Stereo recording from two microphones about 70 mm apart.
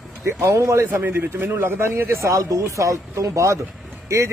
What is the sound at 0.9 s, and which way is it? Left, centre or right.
A man's voice, right.